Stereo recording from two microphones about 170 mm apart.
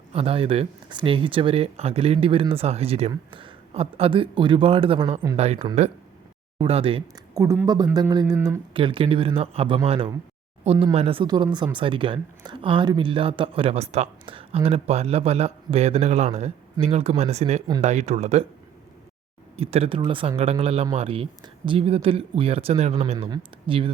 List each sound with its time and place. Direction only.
0.1 s speech: 35° right (ahead or behind)
7.3 s speech: 15° right (ahead or behind); by 18.4 s 40° right (ahead or behind)
19.5 s speech: 35° right (ahead or behind)